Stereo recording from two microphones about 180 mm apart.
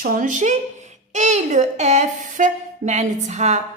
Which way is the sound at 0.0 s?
50° right (ahead or behind).